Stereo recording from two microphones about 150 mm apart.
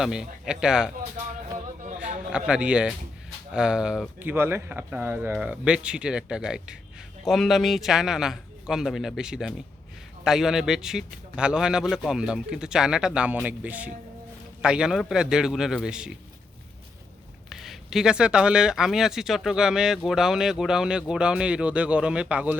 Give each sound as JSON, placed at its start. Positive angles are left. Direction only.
{"t": 0.0, "sound": "speech", "side_deg": -5}
{"t": 2.0, "sound": "speech", "side_deg": -5}
{"t": 17.5, "sound": "speech", "side_deg": -5}